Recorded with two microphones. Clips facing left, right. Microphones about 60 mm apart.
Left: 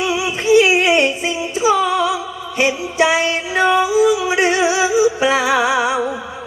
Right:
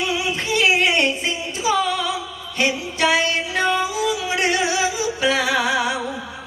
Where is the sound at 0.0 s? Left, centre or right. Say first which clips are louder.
Left 4 dB; centre.